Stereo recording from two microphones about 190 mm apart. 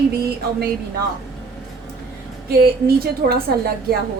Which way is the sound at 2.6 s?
55° right (ahead or behind).